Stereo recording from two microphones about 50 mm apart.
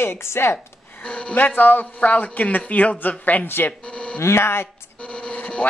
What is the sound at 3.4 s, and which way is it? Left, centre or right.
Speech, left.